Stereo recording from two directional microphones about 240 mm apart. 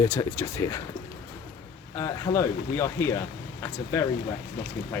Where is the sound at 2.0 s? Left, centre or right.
Centre.